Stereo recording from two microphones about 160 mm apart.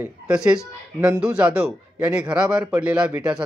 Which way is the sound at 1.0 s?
20° right (ahead or behind).